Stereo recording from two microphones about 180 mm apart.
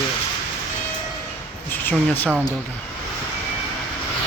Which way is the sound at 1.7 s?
10° left (ahead or behind).